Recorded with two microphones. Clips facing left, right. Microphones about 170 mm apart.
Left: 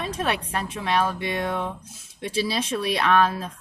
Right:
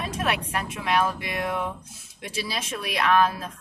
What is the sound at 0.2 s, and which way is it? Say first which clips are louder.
Speech: even; 30° left (ahead or behind).